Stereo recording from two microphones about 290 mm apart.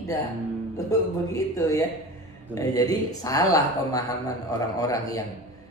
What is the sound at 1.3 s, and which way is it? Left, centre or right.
Speech, centre.